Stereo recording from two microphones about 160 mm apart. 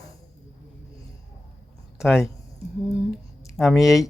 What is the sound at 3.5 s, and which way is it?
Speech, centre (ahead or behind).